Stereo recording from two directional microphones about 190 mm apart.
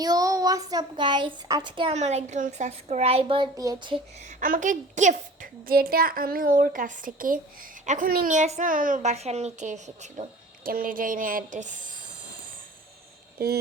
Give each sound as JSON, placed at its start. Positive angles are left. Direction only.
{"t": 0.0, "sound": "speech", "side_deg": -20}
{"t": 4.3, "sound": "a woman's voice", "side_deg": -45}
{"t": 13.4, "sound": "a sound", "side_deg": -55}